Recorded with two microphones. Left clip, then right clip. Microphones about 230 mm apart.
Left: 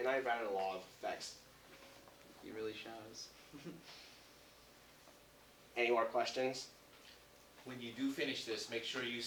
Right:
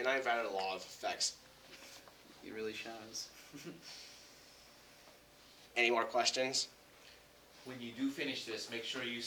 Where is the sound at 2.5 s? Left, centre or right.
Right.